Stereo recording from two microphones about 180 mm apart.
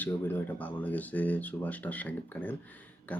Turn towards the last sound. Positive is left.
turn(degrees=10)  # may be behind; listen again after turning